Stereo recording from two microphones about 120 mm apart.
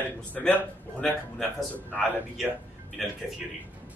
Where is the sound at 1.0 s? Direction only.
5° left (ahead or behind).